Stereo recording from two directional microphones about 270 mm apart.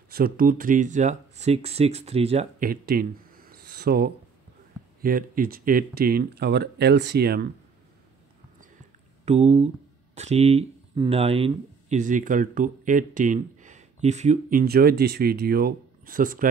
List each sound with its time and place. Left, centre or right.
0.1 s speech: right
9.2 s speech: right